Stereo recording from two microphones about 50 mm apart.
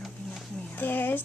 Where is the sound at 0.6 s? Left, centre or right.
Left.